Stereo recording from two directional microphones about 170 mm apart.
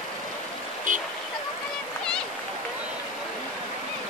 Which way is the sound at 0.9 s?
50° right (ahead or behind).